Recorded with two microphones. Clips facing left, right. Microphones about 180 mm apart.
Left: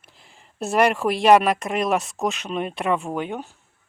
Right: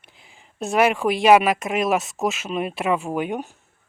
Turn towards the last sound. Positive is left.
turn(degrees=-15)  # may be behind; listen again after turning